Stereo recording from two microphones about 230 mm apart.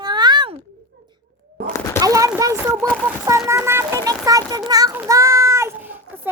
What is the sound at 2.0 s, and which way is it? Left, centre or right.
A child's voice, centre.